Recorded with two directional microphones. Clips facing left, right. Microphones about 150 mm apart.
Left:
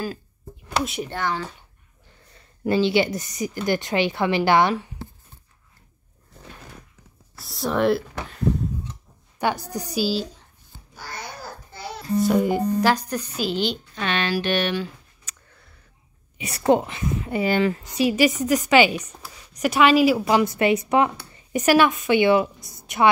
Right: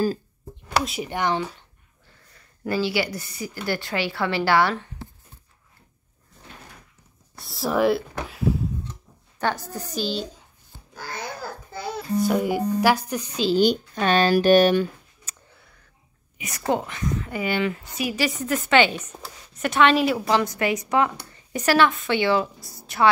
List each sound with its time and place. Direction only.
1.0 s speech: 15° right (ahead or behind)
2.3 s a woman's voice: 25° left (ahead or behind)
7.3 s speech: centre (ahead or behind)
9.4 s a woman's voice: 15° left (ahead or behind)
12.2 s speech: centre (ahead or behind)
13.6 s a child's voice: 45° right (ahead or behind)
16.3 s a woman's voice: 30° left (ahead or behind)
16.7 s a woman's voice: 20° left (ahead or behind)
17.5 s speech: 35° left (ahead or behind)
18.1 s a woman's voice: 20° left (ahead or behind)
20.4 s a woman's voice: 25° left (ahead or behind)